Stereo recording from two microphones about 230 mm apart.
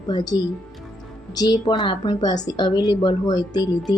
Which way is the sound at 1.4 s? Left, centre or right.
Centre.